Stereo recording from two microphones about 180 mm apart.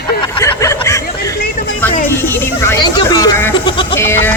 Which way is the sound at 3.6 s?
25° left (ahead or behind).